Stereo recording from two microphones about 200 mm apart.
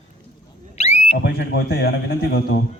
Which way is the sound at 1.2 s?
55° left (ahead or behind).